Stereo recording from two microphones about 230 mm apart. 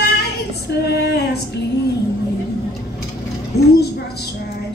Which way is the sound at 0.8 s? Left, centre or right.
Left.